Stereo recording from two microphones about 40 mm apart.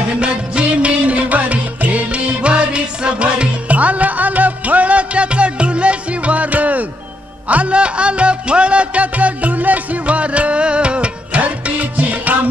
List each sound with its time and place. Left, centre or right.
0.2 s music: right